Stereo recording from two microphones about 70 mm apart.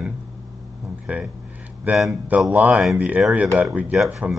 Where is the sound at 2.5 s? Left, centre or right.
Right.